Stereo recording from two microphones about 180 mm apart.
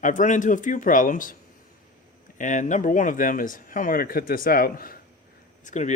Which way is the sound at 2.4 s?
45° left (ahead or behind).